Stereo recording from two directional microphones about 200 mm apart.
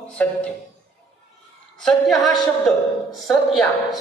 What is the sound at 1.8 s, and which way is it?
A woman's voice, centre (ahead or behind).